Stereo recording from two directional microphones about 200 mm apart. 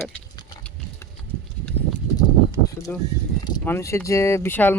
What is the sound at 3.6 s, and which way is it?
Speech, 10° left (ahead or behind).